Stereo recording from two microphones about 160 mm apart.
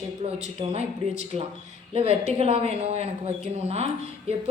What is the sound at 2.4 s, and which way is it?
Speech, 40° right (ahead or behind).